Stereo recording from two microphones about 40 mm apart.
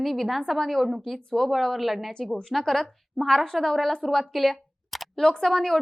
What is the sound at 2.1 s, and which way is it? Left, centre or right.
A woman's voice, centre.